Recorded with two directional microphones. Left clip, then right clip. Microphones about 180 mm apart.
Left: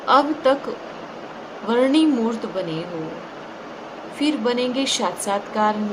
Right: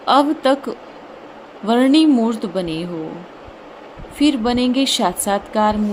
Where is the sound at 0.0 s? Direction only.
55° right (ahead or behind).